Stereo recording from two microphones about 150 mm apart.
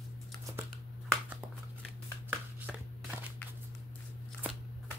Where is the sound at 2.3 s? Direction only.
10° right (ahead or behind).